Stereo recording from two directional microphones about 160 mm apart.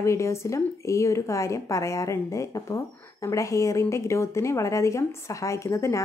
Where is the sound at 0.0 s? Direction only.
20° left (ahead or behind).